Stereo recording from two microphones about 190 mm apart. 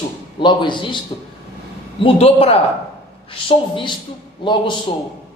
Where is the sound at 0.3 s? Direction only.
25° left (ahead or behind).